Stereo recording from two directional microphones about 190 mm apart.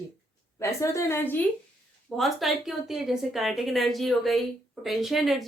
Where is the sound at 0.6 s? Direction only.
15° left (ahead or behind).